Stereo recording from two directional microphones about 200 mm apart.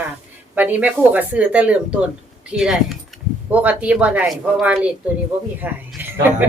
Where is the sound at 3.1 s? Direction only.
Centre (ahead or behind).